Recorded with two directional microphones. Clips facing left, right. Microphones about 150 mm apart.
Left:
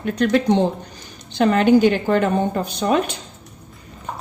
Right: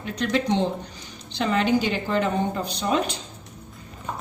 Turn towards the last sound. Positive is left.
turn(degrees=55)  # may be behind; listen again after turning